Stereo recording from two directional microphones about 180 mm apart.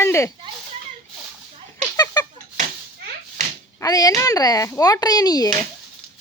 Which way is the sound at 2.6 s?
45° right (ahead or behind).